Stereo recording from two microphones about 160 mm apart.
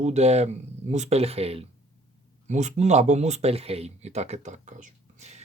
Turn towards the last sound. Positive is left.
turn(degrees=-45)  # may be behind; listen again after turning